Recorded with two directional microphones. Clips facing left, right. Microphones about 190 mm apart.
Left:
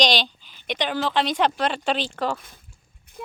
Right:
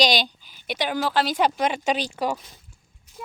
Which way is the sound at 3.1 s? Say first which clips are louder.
Left 3 dB; 55° left (ahead or behind).